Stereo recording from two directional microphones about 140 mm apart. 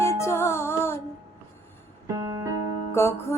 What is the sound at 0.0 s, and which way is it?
Music, 20° left (ahead or behind).